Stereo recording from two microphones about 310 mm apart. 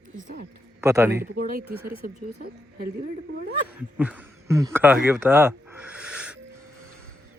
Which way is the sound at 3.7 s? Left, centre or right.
Centre.